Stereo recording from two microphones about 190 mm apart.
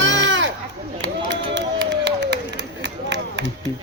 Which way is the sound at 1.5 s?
70° right (ahead or behind).